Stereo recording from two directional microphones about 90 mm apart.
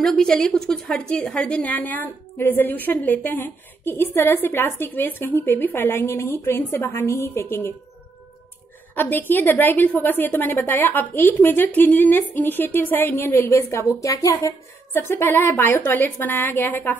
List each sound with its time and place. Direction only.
0.0 s a woman's voice: 10° left (ahead or behind); by 7.7 s 25° left (ahead or behind)
8.9 s a woman's voice: 20° left (ahead or behind); by 14.5 s 40° left (ahead or behind)
14.9 s a woman's voice: 25° left (ahead or behind)